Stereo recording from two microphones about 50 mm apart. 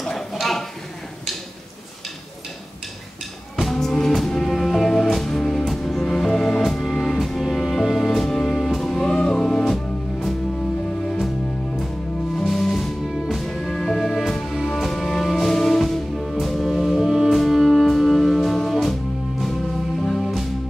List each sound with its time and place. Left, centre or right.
0.0 s a sound: centre
3.7 s music: centre
12.4 s music: centre
20.0 s music: centre